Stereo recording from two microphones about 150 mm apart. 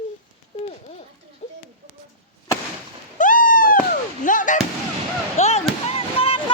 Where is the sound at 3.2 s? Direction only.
65° left (ahead or behind).